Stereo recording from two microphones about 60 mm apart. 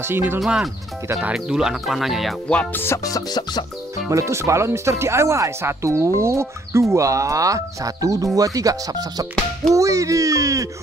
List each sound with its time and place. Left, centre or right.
0.0 s speech: right
1.3 s speech: centre
2.7 s speech: left
3.0 s music: left
4.1 s speech: right
8.4 s speech: right
9.8 s speech: right